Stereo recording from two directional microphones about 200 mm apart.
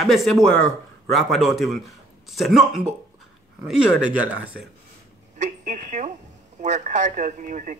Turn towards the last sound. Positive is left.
turn(degrees=-40)  # may be behind; listen again after turning